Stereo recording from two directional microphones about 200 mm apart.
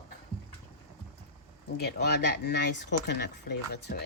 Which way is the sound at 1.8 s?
55° left (ahead or behind).